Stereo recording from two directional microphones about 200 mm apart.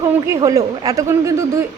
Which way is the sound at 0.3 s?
15° right (ahead or behind).